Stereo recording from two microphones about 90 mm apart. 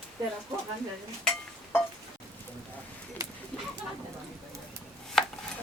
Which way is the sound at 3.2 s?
40° right (ahead or behind).